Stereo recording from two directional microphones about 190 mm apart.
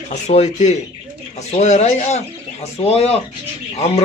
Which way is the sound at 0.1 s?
35° left (ahead or behind).